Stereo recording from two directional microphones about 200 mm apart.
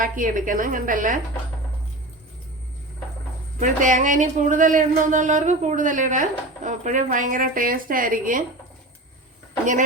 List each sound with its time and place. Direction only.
0.0 s speech: 40° right (ahead or behind)
3.6 s speech: 40° right (ahead or behind)